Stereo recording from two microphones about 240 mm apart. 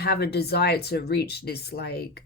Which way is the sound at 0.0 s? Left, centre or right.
Left.